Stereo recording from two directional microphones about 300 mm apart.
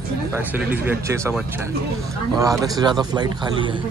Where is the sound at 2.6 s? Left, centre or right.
Centre.